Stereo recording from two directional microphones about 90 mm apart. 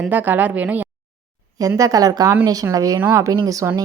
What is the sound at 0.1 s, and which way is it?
Speech, 20° right (ahead or behind).